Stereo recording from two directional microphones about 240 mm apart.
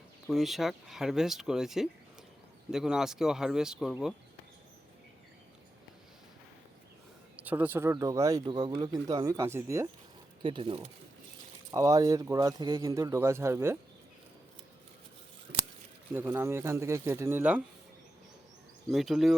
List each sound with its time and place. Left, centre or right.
0.3 s speech: centre
7.4 s speech: centre
15.5 s a sound: right
16.1 s speech: centre
18.9 s speech: centre